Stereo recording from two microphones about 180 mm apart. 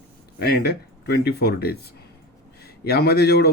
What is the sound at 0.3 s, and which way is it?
A man's voice, 60° left (ahead or behind).